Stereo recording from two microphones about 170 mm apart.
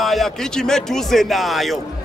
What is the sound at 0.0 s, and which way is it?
A man's voice, centre (ahead or behind).